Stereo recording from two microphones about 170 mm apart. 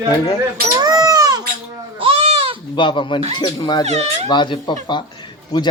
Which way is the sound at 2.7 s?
30° left (ahead or behind).